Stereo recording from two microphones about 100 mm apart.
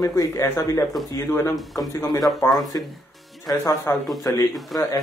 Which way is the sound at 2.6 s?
40° left (ahead or behind).